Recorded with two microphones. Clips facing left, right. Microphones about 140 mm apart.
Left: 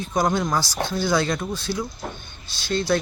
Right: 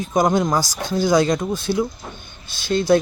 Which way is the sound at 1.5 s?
50° right (ahead or behind).